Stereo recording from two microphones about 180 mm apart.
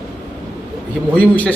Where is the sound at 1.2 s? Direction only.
10° left (ahead or behind).